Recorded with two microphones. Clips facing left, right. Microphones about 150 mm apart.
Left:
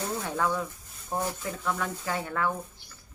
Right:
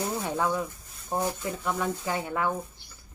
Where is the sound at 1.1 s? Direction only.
15° right (ahead or behind).